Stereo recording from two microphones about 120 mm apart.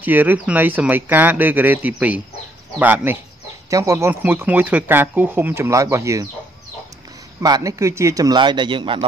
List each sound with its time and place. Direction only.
0.0 s speech: 15° right (ahead or behind)
3.7 s speech: 25° right (ahead or behind)
7.4 s a man's voice: 30° right (ahead or behind)